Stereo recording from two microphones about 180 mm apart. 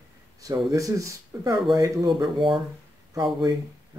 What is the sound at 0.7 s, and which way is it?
Speech, 20° right (ahead or behind).